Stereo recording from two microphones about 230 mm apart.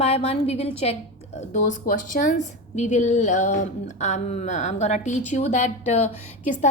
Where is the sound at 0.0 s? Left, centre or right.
Left.